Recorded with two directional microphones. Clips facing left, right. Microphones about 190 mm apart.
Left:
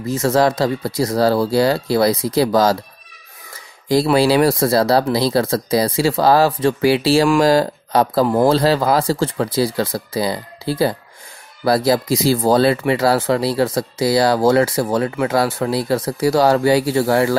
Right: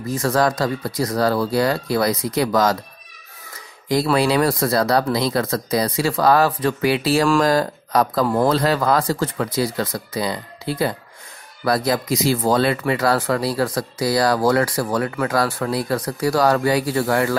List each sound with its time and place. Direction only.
0.1 s speech: 25° left (ahead or behind)
3.9 s speech: 30° left (ahead or behind)